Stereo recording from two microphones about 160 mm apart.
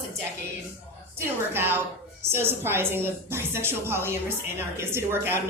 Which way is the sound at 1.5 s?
15° right (ahead or behind).